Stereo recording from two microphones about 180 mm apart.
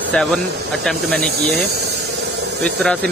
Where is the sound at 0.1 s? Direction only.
5° left (ahead or behind).